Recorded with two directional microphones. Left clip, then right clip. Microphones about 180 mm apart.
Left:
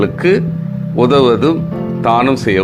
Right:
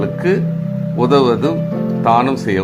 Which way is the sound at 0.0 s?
20° left (ahead or behind).